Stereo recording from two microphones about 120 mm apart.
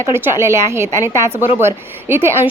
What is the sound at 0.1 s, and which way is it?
A woman's voice, 20° right (ahead or behind).